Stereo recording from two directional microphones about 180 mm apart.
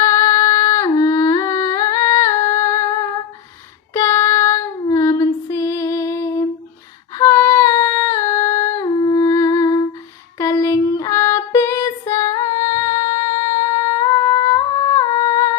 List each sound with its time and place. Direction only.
0.0 s singing: 15° left (ahead or behind)
3.9 s child singing: 15° left (ahead or behind)
7.2 s female singing: 15° left (ahead or behind)
10.3 s child singing: 15° left (ahead or behind)